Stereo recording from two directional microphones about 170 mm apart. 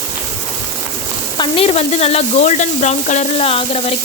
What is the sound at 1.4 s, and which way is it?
Sizzle, 35° left (ahead or behind).